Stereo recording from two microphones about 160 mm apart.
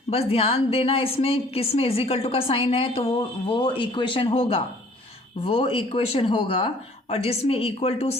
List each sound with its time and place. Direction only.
0.1 s a woman's voice: 40° left (ahead or behind)